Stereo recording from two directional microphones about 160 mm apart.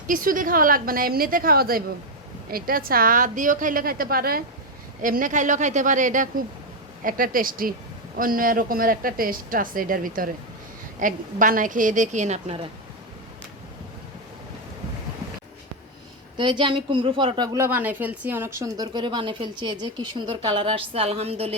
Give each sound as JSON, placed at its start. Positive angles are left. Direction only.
{"t": 0.1, "sound": "a woman's voice", "side_deg": -60}
{"t": 16.4, "sound": "a woman's voice", "side_deg": -30}